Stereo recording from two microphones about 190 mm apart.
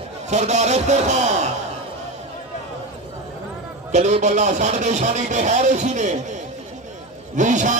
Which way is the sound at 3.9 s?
35° right (ahead or behind).